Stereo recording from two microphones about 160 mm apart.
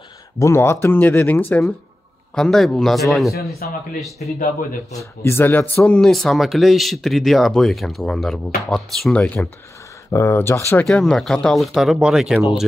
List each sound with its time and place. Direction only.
0.4 s speech: 15° left (ahead or behind); by 3.3 s centre (ahead or behind)
3.6 s speech: 65° left (ahead or behind)
4.9 s speech: 15° left (ahead or behind)
10.9 s speech: 5° left (ahead or behind)